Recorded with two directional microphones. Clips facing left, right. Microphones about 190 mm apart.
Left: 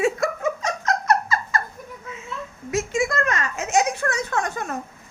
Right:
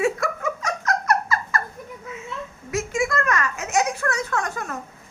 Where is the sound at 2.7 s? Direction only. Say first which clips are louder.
Left 1 dB; 20° left (ahead or behind).